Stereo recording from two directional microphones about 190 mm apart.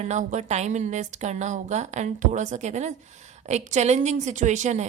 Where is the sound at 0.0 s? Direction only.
40° right (ahead or behind).